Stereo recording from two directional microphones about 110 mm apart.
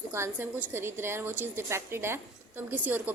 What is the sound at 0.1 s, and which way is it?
A woman's voice, 20° right (ahead or behind).